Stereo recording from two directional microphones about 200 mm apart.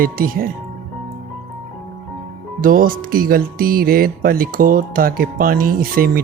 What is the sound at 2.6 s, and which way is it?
Speech, 45° right (ahead or behind).